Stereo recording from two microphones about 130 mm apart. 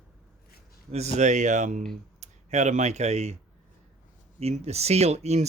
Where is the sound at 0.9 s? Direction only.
55° right (ahead or behind).